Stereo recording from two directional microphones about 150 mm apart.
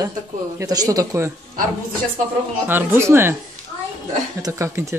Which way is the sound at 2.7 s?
15° right (ahead or behind).